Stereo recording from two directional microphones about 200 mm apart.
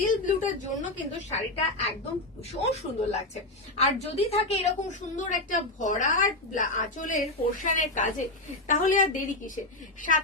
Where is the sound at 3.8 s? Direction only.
30° left (ahead or behind).